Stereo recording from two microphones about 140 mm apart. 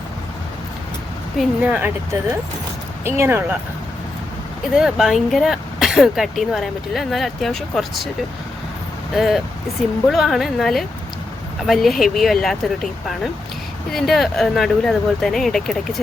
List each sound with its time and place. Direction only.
1.4 s speech: 10° right (ahead or behind)
3.0 s speech: 20° right (ahead or behind)
4.7 s speech: 5° right (ahead or behind)
9.1 s speech: centre (ahead or behind)